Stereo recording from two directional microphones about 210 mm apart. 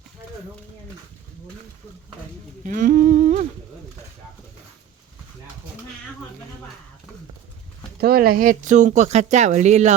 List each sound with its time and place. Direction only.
2.6 s humming: 40° right (ahead or behind)
8.0 s speech: 45° right (ahead or behind)